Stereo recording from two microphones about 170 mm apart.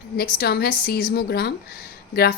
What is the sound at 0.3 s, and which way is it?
A woman's voice, 65° left (ahead or behind).